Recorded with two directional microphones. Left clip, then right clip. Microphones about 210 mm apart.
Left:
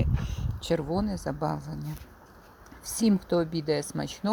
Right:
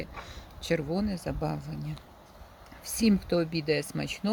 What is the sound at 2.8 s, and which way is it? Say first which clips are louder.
Speech: even; centre (ahead or behind).